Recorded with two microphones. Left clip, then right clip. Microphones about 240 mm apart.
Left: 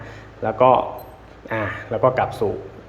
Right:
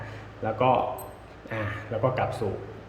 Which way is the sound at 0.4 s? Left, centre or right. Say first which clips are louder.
Left 8 dB; centre.